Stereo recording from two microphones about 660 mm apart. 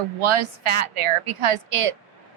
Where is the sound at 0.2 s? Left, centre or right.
Right.